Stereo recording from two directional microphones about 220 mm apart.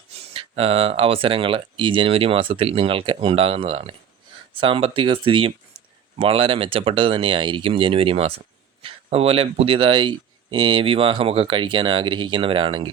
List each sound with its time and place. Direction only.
0.1 s speech: 25° right (ahead or behind)